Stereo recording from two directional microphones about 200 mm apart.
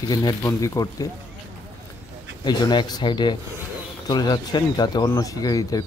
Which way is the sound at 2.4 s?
20° left (ahead or behind).